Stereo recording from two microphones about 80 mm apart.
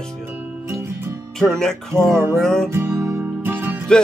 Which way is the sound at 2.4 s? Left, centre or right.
Centre.